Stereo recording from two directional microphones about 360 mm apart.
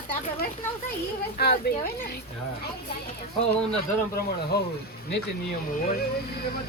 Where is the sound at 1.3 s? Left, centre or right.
Left.